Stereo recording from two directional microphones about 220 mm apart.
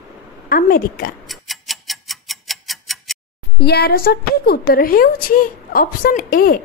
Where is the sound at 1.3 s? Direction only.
Centre (ahead or behind).